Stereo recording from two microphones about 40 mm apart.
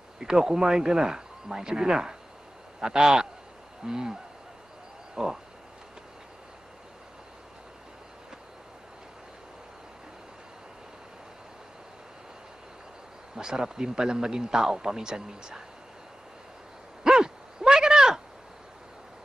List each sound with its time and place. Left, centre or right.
0.2 s speech: centre
13.4 s speech: centre
17.0 s a sound: centre